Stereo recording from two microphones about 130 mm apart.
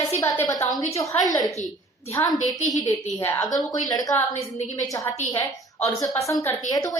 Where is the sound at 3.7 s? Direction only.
30° left (ahead or behind).